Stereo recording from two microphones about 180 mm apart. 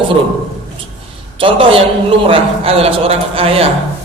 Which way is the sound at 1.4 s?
30° right (ahead or behind).